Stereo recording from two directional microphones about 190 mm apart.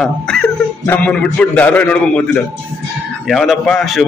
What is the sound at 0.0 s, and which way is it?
A man's voice, 5° left (ahead or behind).